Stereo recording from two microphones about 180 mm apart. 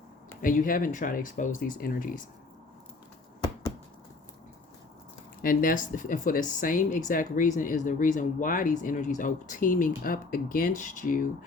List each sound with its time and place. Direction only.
0.4 s speech: 50° left (ahead or behind)
5.4 s speech: 50° left (ahead or behind)